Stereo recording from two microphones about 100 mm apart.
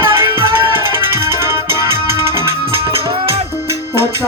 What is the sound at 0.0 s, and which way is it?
Music, 25° right (ahead or behind).